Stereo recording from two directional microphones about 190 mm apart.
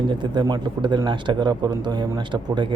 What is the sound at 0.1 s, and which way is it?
A man's voice, 25° right (ahead or behind).